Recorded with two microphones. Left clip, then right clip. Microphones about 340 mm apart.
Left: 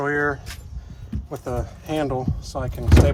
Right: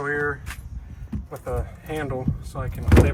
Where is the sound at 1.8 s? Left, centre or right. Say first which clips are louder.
Left 6 dB; centre.